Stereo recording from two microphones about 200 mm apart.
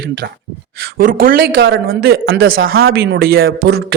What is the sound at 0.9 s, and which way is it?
A man's voice, 45° right (ahead or behind).